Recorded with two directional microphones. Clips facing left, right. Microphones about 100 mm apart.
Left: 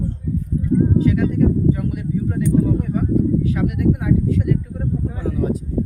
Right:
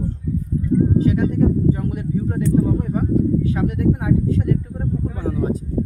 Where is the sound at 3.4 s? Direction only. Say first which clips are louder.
Even; 30° right (ahead or behind).